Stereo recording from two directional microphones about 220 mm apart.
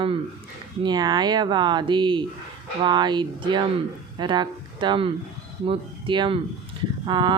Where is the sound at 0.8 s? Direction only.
20° right (ahead or behind).